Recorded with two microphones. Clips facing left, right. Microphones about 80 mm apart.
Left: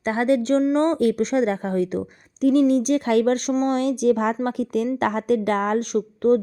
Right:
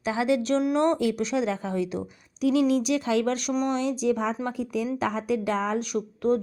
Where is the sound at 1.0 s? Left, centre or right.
Left.